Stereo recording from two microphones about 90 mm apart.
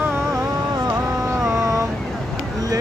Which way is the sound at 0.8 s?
35° right (ahead or behind).